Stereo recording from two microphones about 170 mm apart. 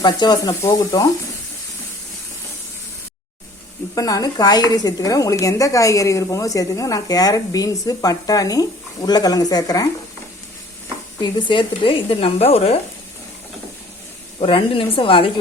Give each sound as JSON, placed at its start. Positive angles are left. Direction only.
{"t": 0.0, "sound": "speech", "side_deg": 25}
{"t": 3.9, "sound": "speech", "side_deg": 20}
{"t": 11.2, "sound": "speech", "side_deg": 25}
{"t": 14.4, "sound": "speech", "side_deg": 30}